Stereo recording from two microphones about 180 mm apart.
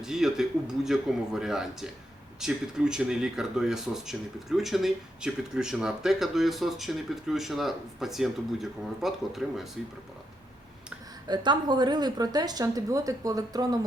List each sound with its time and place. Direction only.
0.0 s speech: centre (ahead or behind)
11.3 s a woman's voice: 25° right (ahead or behind)